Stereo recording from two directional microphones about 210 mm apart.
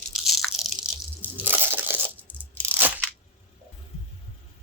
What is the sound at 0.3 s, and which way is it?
Biting, centre (ahead or behind).